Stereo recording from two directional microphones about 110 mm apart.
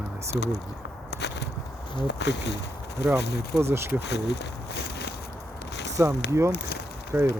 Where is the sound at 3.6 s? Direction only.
25° right (ahead or behind).